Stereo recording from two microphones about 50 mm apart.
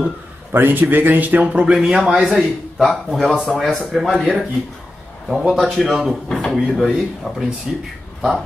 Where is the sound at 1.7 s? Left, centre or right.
Centre.